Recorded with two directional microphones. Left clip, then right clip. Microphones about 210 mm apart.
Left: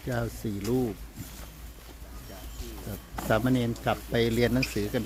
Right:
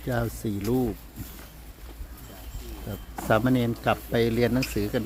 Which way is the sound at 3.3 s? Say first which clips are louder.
Right 3 dB; 15° right (ahead or behind).